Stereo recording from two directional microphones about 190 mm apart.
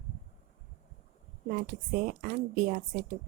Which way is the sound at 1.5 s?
45° right (ahead or behind).